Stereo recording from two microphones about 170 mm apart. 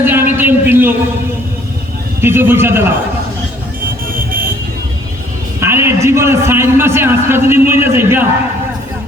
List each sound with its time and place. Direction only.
0.0 s a sound: 10° right (ahead or behind)
2.2 s a man's voice: 15° right (ahead or behind)
4.1 s vehicle: 55° right (ahead or behind)
5.5 s a man's voice: 15° right (ahead or behind)